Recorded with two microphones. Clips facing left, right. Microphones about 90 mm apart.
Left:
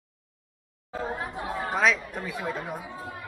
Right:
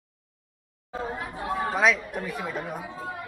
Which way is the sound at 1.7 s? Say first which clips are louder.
Right 1 dB; centre (ahead or behind).